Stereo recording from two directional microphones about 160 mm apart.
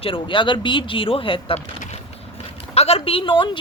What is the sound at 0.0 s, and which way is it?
Speech, 30° left (ahead or behind).